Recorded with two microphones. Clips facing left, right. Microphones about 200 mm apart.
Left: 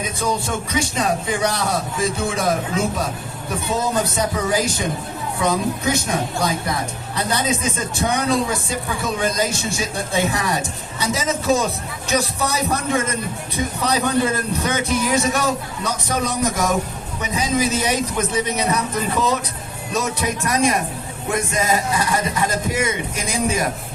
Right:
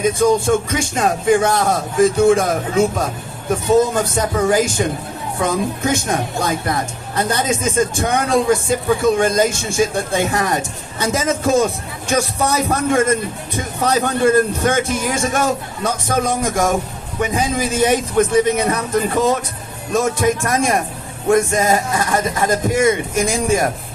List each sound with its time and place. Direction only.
0.2 s a man's voice: 50° right (ahead or behind)